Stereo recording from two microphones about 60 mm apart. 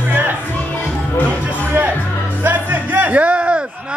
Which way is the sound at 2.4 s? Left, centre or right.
Right.